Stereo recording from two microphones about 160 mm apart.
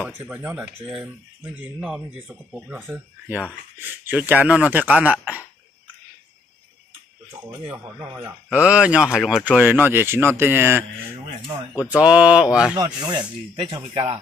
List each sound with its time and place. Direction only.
0.0 s speech: 10° right (ahead or behind)
7.2 s speech: 20° right (ahead or behind)
11.9 s speech: 5° right (ahead or behind)
12.7 s speech: 25° right (ahead or behind)